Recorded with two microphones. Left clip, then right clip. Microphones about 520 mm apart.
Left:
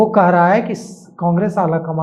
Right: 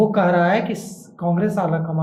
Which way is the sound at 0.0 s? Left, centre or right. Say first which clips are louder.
Left 5 dB; left.